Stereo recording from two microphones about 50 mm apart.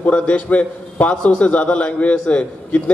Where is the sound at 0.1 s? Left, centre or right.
Left.